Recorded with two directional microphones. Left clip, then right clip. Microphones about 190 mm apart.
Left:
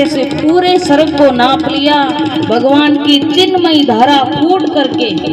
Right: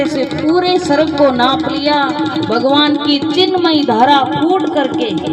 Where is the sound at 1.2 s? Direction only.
45° left (ahead or behind).